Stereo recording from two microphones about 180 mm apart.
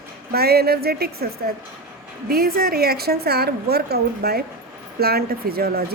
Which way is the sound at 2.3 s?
55° right (ahead or behind).